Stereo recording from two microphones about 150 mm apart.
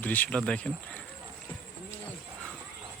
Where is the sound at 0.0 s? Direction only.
10° left (ahead or behind).